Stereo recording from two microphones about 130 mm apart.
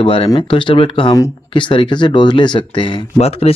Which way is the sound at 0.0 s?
45° left (ahead or behind).